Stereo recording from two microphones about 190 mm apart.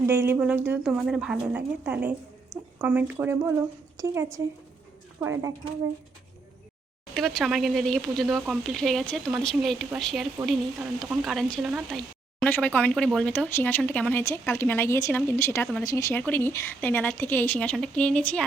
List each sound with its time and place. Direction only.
0.1 s a woman's voice: 10° right (ahead or behind)
7.1 s a woman's voice: centre (ahead or behind)